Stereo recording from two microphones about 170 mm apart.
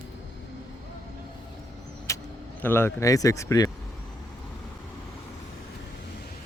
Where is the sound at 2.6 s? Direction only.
15° left (ahead or behind).